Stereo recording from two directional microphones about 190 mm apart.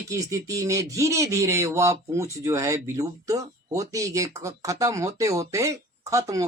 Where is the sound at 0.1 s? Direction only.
15° right (ahead or behind).